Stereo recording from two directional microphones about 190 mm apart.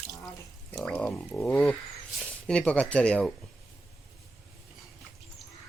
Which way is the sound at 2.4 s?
5° left (ahead or behind).